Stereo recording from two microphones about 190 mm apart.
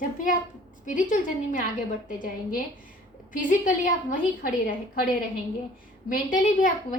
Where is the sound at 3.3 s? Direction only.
45° left (ahead or behind).